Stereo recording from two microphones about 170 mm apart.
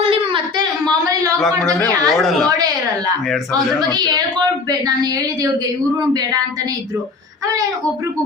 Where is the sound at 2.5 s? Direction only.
20° right (ahead or behind).